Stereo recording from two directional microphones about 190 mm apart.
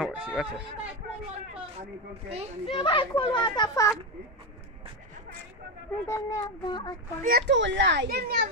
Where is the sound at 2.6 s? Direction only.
30° left (ahead or behind).